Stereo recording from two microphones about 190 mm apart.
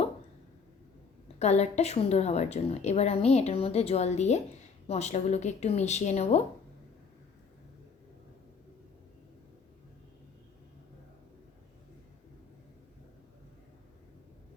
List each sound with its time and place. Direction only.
1.4 s a woman's voice: 35° left (ahead or behind)